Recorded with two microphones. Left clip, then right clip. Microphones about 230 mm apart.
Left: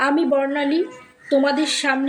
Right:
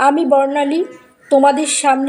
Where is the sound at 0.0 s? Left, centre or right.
Centre.